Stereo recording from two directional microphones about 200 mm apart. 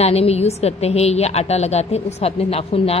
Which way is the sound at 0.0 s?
30° left (ahead or behind).